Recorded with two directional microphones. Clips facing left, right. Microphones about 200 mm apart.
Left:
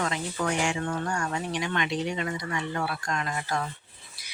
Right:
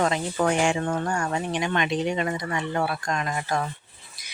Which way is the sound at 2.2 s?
50° right (ahead or behind).